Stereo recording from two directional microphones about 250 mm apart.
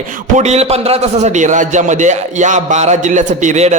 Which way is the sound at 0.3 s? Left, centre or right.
Right.